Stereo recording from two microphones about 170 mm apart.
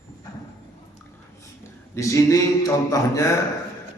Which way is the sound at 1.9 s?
20° left (ahead or behind).